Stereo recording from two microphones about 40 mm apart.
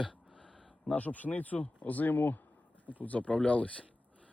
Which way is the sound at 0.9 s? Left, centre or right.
Left.